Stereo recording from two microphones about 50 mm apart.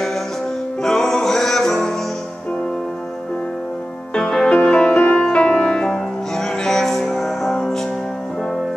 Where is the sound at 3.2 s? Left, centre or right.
Centre.